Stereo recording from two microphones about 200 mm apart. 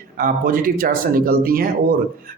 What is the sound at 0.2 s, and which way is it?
Speech, 45° right (ahead or behind).